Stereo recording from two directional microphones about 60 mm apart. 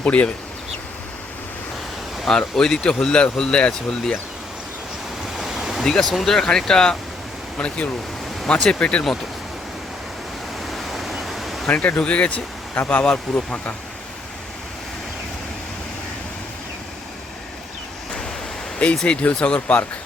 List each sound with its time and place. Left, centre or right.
0.0 s speech: left
2.3 s speech: centre
5.4 s ocean: centre
5.8 s speech: centre
8.8 s speech: centre
10.6 s waves: centre
11.7 s speech: left
18.8 s speech: centre